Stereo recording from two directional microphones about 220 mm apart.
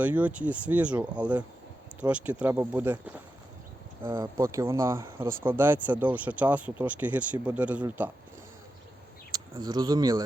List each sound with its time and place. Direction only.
0.0 s speech: 5° right (ahead or behind)
4.1 s speech: 15° right (ahead or behind)
9.3 s speech: 20° right (ahead or behind)